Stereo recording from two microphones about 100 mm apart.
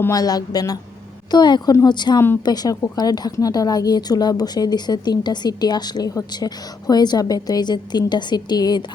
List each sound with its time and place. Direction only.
0.1 s a woman's voice: 40° left (ahead or behind)
2.1 s speech: 25° left (ahead or behind)
2.4 s a woman's voice: 40° left (ahead or behind)